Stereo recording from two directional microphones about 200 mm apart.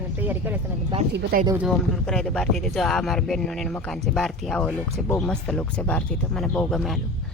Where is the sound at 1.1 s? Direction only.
55° right (ahead or behind).